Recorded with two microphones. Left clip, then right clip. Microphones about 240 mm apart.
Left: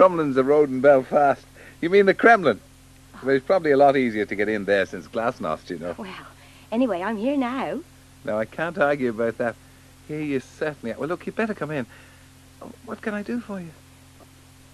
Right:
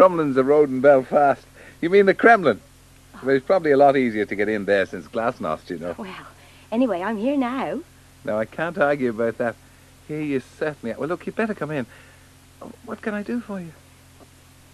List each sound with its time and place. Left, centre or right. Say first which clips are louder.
0.0 s a man's voice: right 1 dB; centre